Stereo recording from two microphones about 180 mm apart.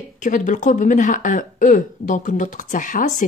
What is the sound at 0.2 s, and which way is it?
A woman's voice, 45° left (ahead or behind).